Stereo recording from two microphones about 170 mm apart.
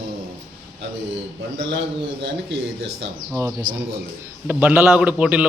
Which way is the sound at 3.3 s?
20° right (ahead or behind).